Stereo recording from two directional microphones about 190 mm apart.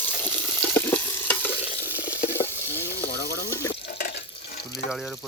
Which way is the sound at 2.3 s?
10° left (ahead or behind).